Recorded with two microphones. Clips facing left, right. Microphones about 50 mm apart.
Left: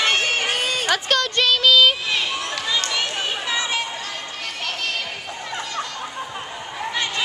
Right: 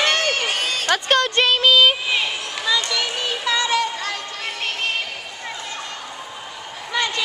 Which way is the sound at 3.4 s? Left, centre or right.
Right.